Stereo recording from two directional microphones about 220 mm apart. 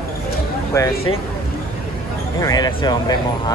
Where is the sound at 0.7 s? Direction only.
15° left (ahead or behind).